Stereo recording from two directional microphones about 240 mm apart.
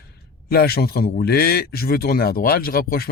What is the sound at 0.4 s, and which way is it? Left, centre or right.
A man's voice, left.